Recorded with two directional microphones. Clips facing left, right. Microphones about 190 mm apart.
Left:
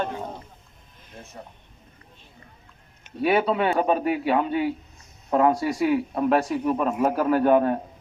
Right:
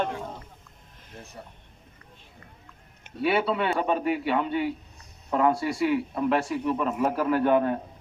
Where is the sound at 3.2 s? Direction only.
45° left (ahead or behind).